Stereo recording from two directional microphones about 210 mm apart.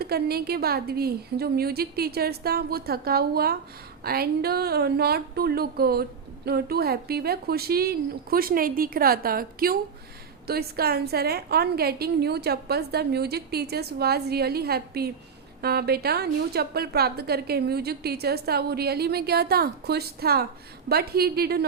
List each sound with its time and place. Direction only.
0.0 s speech: 50° right (ahead or behind)